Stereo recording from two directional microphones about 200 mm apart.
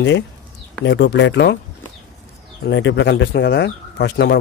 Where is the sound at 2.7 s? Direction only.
65° left (ahead or behind).